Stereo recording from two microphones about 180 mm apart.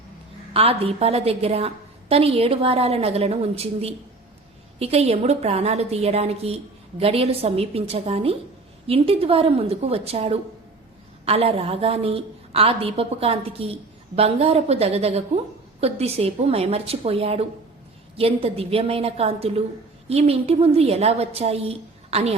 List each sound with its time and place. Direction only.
0.5 s a woman's voice: 35° right (ahead or behind)